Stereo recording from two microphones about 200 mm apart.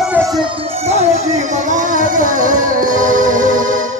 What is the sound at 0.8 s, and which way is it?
Music, 30° right (ahead or behind).